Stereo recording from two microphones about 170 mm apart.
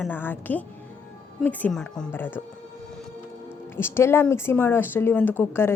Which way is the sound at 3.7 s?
15° left (ahead or behind).